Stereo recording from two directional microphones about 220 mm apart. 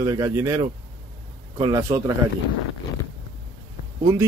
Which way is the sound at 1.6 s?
15° right (ahead or behind).